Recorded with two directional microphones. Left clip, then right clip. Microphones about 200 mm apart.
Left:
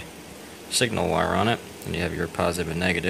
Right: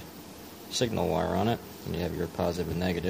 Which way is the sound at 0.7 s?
5° right (ahead or behind).